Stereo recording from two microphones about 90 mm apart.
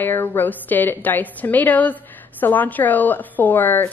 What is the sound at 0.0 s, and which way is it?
A woman's voice, 25° left (ahead or behind).